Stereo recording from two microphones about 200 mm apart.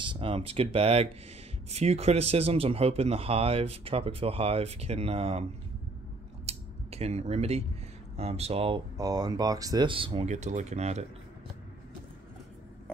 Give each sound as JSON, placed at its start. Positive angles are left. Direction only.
{"t": 0.0, "sound": "speech", "side_deg": -25}
{"t": 6.4, "sound": "scissors", "side_deg": -30}
{"t": 8.2, "sound": "speech", "side_deg": -30}